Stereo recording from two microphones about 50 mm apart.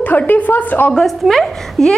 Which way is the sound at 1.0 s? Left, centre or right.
Centre.